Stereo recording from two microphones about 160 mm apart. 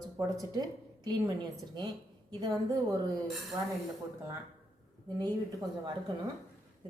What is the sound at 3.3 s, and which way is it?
Speech, centre (ahead or behind).